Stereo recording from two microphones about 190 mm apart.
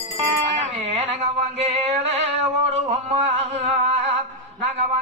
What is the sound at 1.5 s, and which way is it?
Music, 35° right (ahead or behind).